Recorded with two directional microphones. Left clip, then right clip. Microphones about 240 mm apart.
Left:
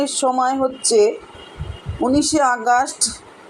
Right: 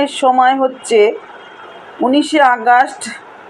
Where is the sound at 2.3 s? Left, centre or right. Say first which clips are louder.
Right 8 dB; centre.